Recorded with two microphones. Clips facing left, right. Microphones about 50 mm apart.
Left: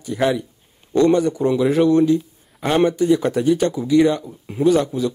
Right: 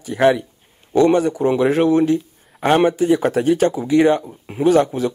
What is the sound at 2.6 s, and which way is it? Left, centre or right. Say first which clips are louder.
Speech: right 2 dB; right.